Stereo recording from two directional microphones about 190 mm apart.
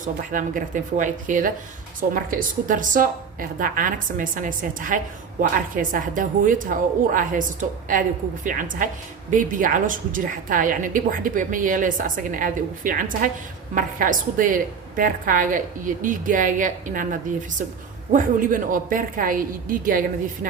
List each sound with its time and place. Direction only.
0.0 s a woman's voice: 45° right (ahead or behind)